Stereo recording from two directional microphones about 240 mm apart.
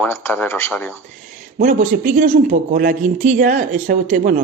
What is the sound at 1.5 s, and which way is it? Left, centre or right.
A man's voice, right.